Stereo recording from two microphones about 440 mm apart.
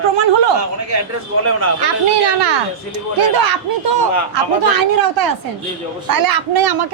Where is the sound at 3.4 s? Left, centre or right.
Right.